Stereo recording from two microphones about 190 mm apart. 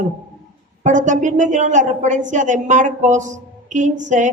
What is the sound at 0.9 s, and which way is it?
A woman's voice, 40° right (ahead or behind).